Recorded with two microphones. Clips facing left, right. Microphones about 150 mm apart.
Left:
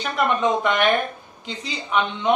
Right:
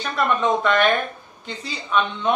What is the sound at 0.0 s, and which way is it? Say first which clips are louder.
Speech: even; 15° left (ahead or behind).